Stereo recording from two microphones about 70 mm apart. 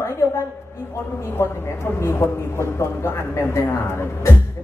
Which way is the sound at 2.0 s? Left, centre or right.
Left.